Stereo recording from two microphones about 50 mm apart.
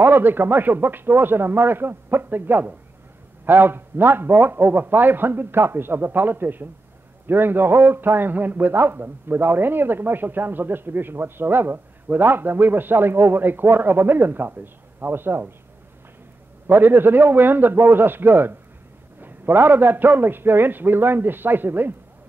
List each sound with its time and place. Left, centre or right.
0.0 s a man's voice: right
16.6 s a man's voice: right